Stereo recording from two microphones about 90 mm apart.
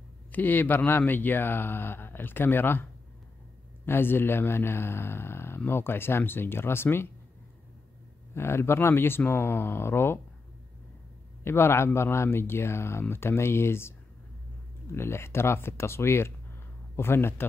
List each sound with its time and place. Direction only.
0.3 s speech: 20° left (ahead or behind)
8.4 s speech: 25° left (ahead or behind)
11.4 s speech: 25° left (ahead or behind)